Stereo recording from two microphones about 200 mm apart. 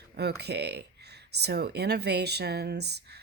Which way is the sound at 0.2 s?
55° right (ahead or behind).